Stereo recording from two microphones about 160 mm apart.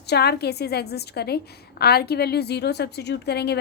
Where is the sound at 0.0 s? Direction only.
90° left.